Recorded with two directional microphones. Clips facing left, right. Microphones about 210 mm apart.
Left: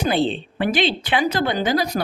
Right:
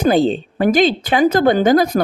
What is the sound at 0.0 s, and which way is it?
Speech, 40° right (ahead or behind).